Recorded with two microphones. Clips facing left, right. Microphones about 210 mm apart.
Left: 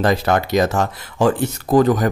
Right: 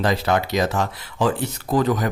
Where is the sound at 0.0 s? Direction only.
50° left (ahead or behind).